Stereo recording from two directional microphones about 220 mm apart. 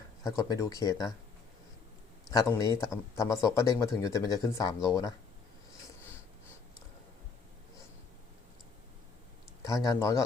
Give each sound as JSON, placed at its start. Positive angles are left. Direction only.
{"t": 0.3, "sound": "speech", "side_deg": 15}
{"t": 2.3, "sound": "speech", "side_deg": 15}
{"t": 9.6, "sound": "speech", "side_deg": 15}